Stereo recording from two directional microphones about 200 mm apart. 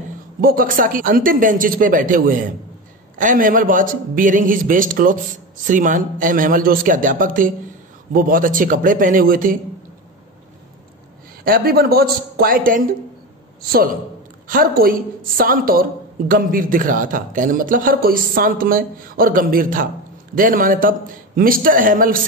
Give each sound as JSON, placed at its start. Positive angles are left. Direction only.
{"t": 0.4, "sound": "a woman's voice", "side_deg": -45}
{"t": 11.4, "sound": "a woman's voice", "side_deg": -45}